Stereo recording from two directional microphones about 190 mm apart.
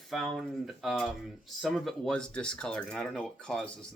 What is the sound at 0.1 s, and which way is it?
Speech, centre (ahead or behind).